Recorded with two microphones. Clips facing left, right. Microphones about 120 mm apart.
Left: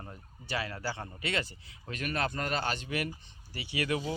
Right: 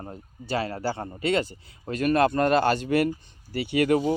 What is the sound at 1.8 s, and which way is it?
Speech, 40° right (ahead or behind).